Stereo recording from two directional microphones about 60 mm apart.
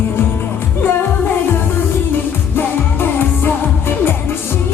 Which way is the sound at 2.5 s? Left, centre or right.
Left.